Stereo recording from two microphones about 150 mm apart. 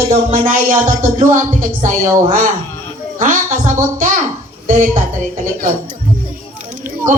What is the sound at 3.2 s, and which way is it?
A woman's voice, 55° right (ahead or behind).